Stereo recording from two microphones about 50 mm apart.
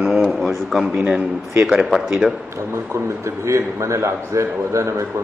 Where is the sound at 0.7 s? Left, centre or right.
Centre.